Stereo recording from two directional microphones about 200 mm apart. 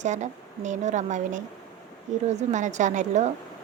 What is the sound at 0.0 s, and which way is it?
A woman's voice, 35° right (ahead or behind).